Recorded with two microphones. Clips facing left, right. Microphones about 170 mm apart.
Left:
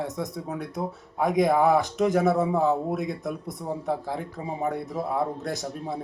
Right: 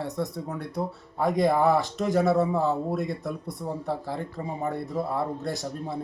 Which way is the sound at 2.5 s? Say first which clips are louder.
Left 2 dB; 20° left (ahead or behind).